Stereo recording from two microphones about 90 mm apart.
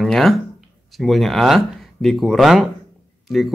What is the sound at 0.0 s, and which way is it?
Speech, 5° left (ahead or behind).